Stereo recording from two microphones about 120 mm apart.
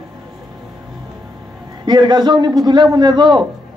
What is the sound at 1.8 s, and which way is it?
Speech, 35° right (ahead or behind).